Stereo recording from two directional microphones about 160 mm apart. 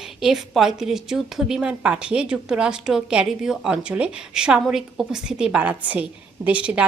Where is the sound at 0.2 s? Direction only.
Centre (ahead or behind).